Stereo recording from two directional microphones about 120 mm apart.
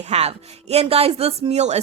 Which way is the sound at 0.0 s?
60° right (ahead or behind).